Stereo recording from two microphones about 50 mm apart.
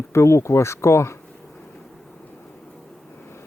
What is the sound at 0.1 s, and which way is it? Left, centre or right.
Speech, left.